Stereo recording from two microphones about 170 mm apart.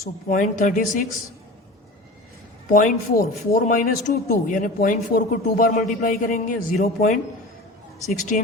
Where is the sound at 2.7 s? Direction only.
50° left (ahead or behind).